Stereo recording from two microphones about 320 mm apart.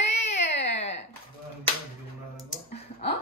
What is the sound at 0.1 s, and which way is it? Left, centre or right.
Baby cry, centre.